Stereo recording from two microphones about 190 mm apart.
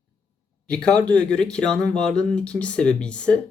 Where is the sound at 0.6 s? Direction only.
5° left (ahead or behind).